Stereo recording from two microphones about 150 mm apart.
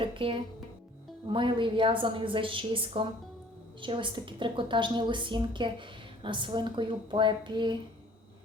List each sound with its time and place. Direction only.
0.0 s a woman's voice: 35° right (ahead or behind)